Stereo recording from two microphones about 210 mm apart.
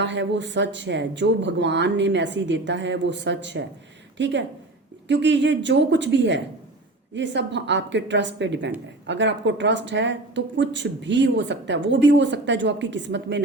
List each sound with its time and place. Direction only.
0.0 s speech: 60° right (ahead or behind)